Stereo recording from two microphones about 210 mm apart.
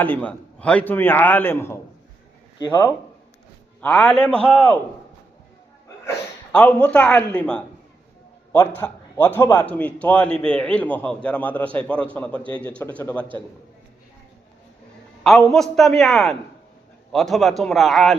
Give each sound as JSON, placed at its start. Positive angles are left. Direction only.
{"t": 0.0, "sound": "a man's voice", "side_deg": 5}
{"t": 3.8, "sound": "a man's voice", "side_deg": 5}
{"t": 6.1, "sound": "a man's voice", "side_deg": 5}
{"t": 15.2, "sound": "a man's voice", "side_deg": 0}